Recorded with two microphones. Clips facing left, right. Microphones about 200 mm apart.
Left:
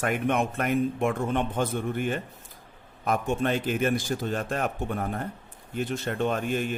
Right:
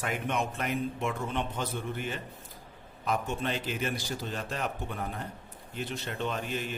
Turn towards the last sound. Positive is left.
turn(degrees=50)  # may be behind; listen again after turning